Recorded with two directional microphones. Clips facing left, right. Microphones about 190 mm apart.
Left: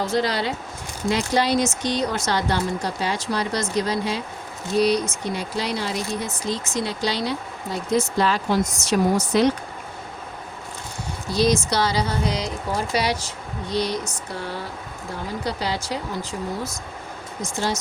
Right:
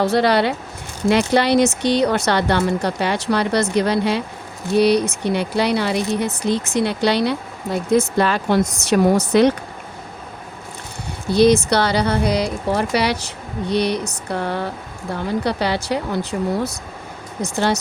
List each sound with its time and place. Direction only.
0.0 s speech: 65° right (ahead or behind)
11.3 s speech: 60° right (ahead or behind)
17.4 s speech: 65° right (ahead or behind)